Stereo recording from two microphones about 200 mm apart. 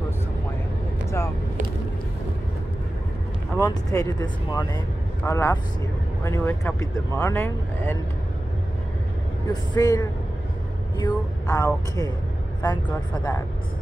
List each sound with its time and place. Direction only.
3.5 s speech: 15° left (ahead or behind)
9.5 s speech: 20° left (ahead or behind)